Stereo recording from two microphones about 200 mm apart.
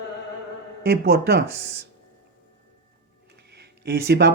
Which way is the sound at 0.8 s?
55° right (ahead or behind).